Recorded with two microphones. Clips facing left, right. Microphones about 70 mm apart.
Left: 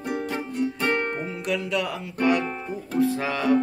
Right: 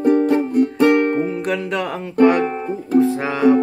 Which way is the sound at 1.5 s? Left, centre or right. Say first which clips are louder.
Right 4 dB; right.